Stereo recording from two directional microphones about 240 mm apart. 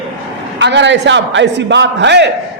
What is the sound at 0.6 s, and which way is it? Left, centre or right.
A man's voice, right.